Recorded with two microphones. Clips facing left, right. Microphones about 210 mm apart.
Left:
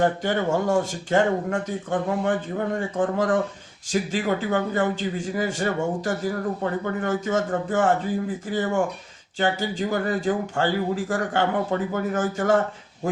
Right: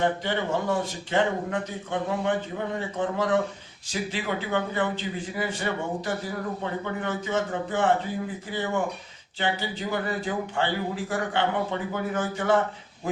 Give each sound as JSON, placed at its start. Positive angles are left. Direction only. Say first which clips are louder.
{"t": 0.0, "sound": "a man's voice", "louder": "left 4 dB", "side_deg": 45}